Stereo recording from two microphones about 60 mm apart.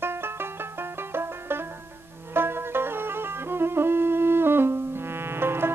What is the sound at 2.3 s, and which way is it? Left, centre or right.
Music, right.